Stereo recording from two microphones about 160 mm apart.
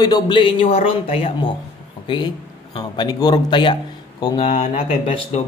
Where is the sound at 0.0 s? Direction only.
25° left (ahead or behind).